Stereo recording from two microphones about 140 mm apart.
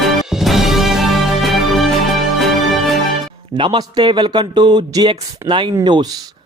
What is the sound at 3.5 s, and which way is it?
A man's voice, 35° right (ahead or behind).